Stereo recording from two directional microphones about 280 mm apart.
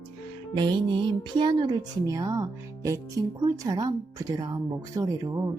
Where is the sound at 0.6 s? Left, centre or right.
Centre.